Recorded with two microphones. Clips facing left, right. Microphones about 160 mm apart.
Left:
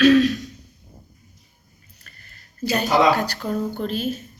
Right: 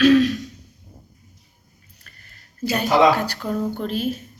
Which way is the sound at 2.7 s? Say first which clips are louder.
Right 1 dB; 35° left (ahead or behind).